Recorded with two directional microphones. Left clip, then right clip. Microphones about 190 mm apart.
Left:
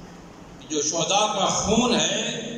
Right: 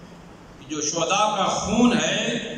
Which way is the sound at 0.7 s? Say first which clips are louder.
Even; 20° left (ahead or behind).